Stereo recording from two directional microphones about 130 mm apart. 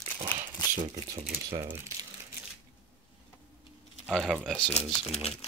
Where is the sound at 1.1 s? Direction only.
50° right (ahead or behind).